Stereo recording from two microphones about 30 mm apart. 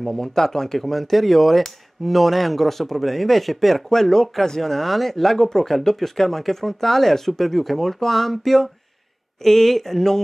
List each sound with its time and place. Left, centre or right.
0.1 s speech: centre
0.7 s speech: centre